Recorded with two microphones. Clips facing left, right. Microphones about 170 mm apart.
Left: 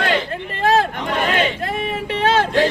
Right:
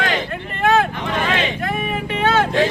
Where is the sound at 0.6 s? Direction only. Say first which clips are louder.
Even; 35° left (ahead or behind).